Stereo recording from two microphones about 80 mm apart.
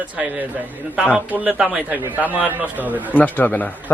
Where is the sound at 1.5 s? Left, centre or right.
Centre.